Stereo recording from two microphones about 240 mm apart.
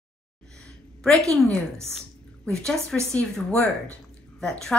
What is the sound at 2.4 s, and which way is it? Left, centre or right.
A woman's voice, centre.